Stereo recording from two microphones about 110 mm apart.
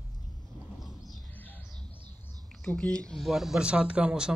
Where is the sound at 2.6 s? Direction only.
10° left (ahead or behind); by 4.3 s 10° right (ahead or behind).